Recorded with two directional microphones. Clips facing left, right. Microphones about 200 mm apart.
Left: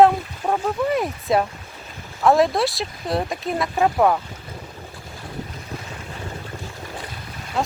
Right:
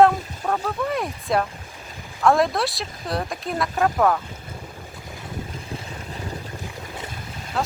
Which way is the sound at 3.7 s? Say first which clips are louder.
Left 2 dB; 15° left (ahead or behind).